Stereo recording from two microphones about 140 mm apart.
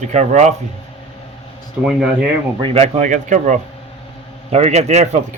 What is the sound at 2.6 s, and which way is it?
Speech, 45° right (ahead or behind).